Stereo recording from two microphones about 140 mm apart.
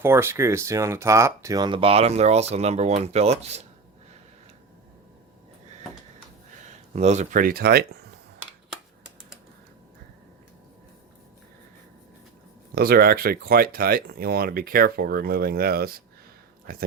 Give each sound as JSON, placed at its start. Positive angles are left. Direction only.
{"t": 0.0, "sound": "speech", "side_deg": -15}
{"t": 6.9, "sound": "speech", "side_deg": -55}
{"t": 12.7, "sound": "speech", "side_deg": -90}